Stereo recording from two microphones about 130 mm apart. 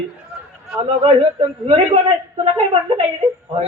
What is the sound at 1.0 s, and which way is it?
Speech, 45° right (ahead or behind).